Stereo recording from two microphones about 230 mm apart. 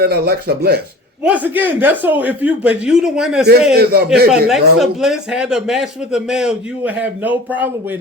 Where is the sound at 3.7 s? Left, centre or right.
Right.